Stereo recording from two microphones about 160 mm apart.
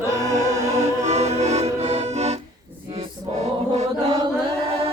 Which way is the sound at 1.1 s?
45° right (ahead or behind).